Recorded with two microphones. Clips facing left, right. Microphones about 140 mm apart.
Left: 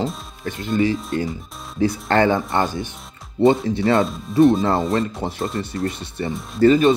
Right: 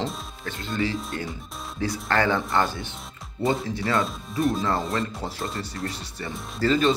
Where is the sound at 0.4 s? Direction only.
20° left (ahead or behind).